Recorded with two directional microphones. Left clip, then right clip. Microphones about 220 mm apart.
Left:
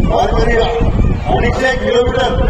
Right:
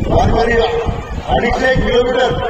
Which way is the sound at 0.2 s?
30° left (ahead or behind).